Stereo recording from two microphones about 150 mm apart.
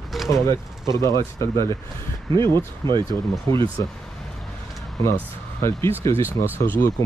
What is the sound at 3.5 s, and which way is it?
Speech, 20° left (ahead or behind).